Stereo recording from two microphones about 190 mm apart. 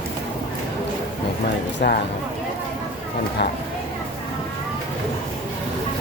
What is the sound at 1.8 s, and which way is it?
Speech, 60° left (ahead or behind).